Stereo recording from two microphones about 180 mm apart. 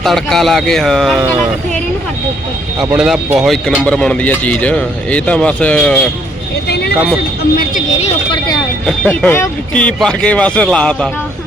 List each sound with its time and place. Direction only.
0.0 s speech: centre (ahead or behind)
2.8 s a man's voice: 5° right (ahead or behind)
6.7 s a sound: 65° left (ahead or behind)
7.5 s speech: 55° left (ahead or behind)
7.9 s speech: 35° left (ahead or behind)
8.9 s speech: 10° left (ahead or behind)